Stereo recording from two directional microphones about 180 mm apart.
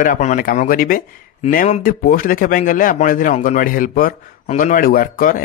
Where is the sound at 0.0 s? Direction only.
45° left (ahead or behind).